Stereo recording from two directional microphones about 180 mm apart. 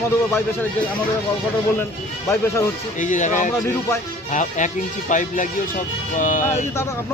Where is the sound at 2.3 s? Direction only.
15° left (ahead or behind).